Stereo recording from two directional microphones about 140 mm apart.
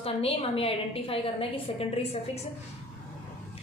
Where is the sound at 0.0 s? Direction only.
45° left (ahead or behind).